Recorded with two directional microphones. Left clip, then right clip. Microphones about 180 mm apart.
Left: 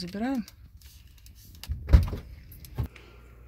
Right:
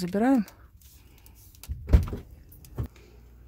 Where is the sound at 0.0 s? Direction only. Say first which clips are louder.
Right 8 dB; 50° right (ahead or behind).